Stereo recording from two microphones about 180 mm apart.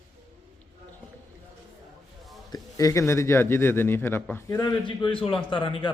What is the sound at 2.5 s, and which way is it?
A man's voice, 20° left (ahead or behind).